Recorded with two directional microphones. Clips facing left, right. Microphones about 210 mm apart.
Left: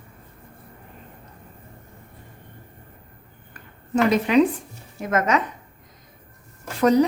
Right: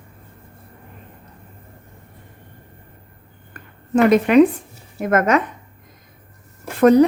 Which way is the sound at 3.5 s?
55° right (ahead or behind).